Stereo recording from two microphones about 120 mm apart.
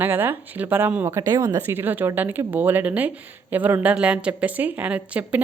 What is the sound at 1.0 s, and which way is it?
Speech, 25° right (ahead or behind).